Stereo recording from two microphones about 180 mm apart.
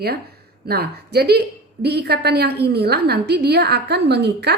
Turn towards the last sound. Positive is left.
turn(degrees=-70)  # may be behind; listen again after turning